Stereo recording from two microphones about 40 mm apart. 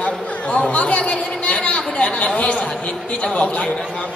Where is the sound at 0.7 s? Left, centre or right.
Left.